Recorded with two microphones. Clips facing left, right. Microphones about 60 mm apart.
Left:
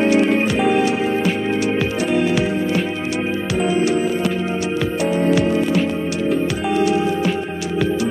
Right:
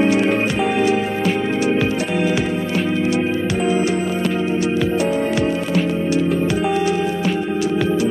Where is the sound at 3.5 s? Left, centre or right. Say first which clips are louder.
Left 4 dB; centre.